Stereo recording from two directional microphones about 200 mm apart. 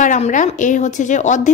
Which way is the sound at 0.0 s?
40° left (ahead or behind).